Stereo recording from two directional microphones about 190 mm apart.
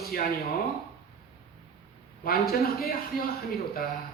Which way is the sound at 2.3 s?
55° left (ahead or behind).